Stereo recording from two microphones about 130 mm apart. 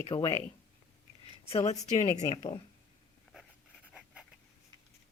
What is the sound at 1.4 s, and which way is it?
Speech, 55° left (ahead or behind).